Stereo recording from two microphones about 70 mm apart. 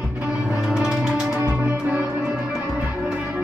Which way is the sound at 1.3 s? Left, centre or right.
Right.